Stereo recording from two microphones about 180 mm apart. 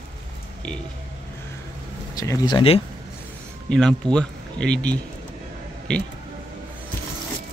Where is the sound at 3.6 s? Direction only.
5° left (ahead or behind).